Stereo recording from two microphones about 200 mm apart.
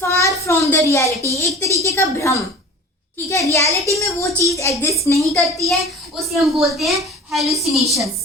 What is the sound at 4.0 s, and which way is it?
A woman's voice, 15° left (ahead or behind).